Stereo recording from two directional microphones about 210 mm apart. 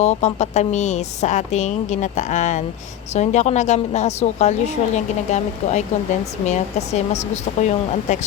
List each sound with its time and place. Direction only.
0.0 s a woman's voice: 30° left (ahead or behind)